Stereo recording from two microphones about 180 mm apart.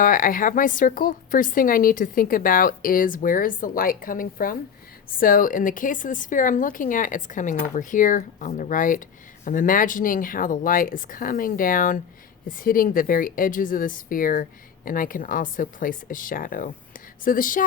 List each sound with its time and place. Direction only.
0.0 s speech: 50° left (ahead or behind)